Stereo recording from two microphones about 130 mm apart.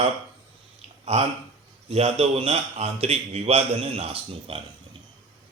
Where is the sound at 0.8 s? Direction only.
55° right (ahead or behind).